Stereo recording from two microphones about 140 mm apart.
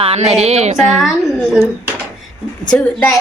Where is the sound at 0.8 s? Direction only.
Centre (ahead or behind).